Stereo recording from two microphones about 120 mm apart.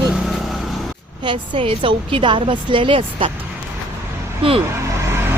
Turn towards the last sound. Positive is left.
turn(degrees=-20)  # may be behind; listen again after turning